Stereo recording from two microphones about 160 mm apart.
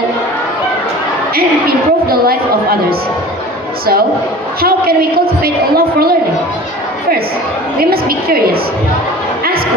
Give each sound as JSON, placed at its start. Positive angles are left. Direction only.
{"t": 1.3, "sound": "a sound", "side_deg": -70}
{"t": 4.6, "sound": "a woman's voice", "side_deg": -70}
{"t": 7.9, "sound": "a woman's voice", "side_deg": -70}